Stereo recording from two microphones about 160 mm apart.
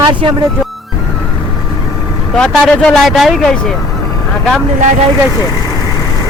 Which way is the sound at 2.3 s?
5° left (ahead or behind).